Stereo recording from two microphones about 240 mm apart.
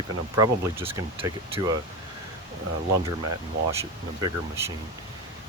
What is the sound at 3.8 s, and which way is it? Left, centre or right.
Speech, centre.